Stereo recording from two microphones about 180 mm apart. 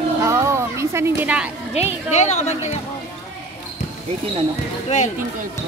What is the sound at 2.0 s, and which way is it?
Speech, 40° left (ahead or behind).